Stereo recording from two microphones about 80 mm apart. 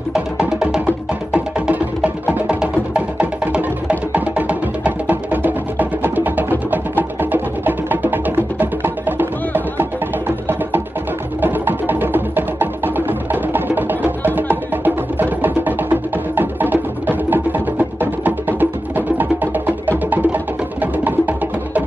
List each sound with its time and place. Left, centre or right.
0.1 s music: centre